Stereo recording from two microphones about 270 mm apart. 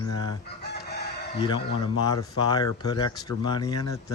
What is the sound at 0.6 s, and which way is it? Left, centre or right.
Chicken, left.